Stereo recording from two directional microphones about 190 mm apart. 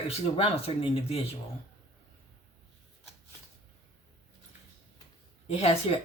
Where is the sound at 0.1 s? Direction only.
30° left (ahead or behind).